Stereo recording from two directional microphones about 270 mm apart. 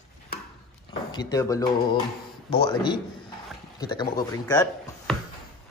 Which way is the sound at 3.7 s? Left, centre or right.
Centre.